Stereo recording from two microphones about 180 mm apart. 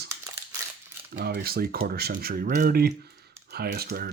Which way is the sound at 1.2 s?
65° right (ahead or behind).